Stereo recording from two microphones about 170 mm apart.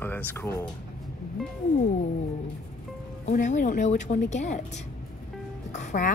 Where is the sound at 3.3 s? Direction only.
45° left (ahead or behind).